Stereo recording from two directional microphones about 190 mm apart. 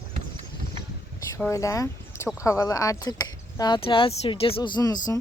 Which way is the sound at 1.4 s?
15° left (ahead or behind).